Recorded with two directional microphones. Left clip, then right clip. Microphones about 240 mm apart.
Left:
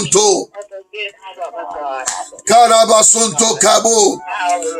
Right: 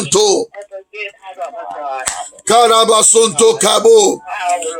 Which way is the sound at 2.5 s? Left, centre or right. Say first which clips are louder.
Left 1 dB; right.